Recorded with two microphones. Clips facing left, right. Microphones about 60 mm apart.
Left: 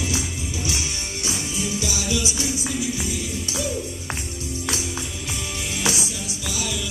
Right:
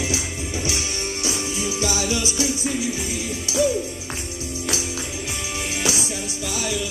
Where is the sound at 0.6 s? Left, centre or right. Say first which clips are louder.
Right 3 dB; right.